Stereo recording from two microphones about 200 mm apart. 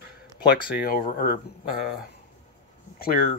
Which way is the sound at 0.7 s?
45° left (ahead or behind).